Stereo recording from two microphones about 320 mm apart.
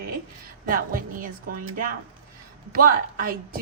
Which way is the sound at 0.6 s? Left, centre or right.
Right.